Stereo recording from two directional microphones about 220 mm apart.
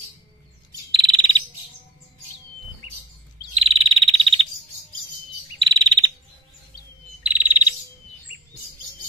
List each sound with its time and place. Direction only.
0.9 s frog: 20° right (ahead or behind)
3.5 s frog: 25° right (ahead or behind)
5.6 s chirp: 25° right (ahead or behind)
7.2 s bird: 5° right (ahead or behind)